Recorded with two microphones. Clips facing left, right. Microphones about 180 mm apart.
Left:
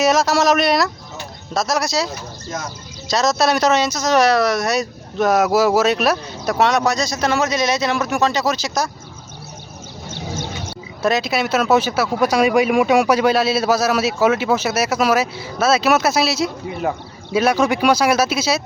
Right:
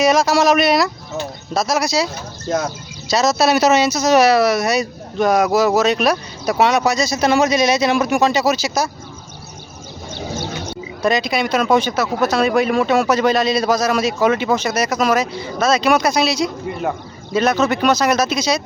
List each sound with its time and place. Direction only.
0.0 s speech: centre (ahead or behind)
2.5 s speech: 75° right (ahead or behind)
3.1 s speech: centre (ahead or behind)
10.7 s speech: 5° left (ahead or behind)